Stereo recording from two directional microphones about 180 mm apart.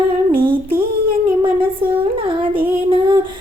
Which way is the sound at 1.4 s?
30° right (ahead or behind).